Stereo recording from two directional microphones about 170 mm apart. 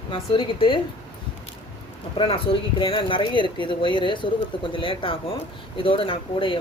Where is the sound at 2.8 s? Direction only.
30° left (ahead or behind).